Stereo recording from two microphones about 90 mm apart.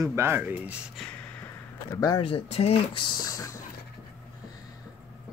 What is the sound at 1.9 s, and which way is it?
Speech, 45° left (ahead or behind).